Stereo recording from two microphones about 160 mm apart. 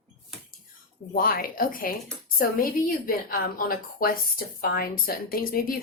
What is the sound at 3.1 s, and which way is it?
A woman's voice, 65° left (ahead or behind).